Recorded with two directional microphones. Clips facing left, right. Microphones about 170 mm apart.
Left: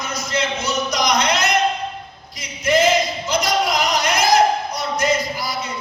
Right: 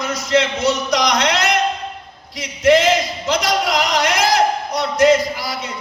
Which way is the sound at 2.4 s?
90° right.